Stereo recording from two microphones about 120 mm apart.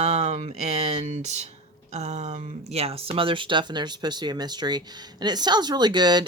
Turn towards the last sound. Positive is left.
turn(degrees=-35)  # may be behind; listen again after turning